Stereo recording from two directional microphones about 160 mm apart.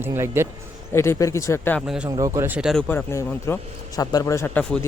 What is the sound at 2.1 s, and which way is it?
Speech, 20° right (ahead or behind).